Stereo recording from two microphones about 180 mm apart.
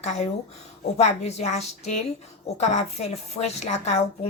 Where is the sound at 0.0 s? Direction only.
40° left (ahead or behind).